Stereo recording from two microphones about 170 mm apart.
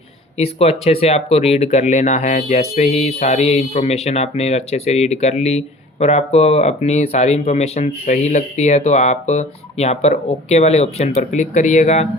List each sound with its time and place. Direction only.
0.3 s speech: 35° left (ahead or behind)